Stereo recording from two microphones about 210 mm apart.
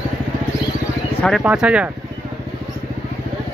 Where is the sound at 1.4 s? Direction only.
5° right (ahead or behind).